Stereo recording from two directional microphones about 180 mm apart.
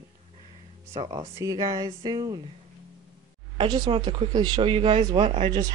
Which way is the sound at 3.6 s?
25° right (ahead or behind).